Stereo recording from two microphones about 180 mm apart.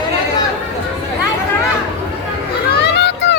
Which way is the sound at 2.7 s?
70° left (ahead or behind).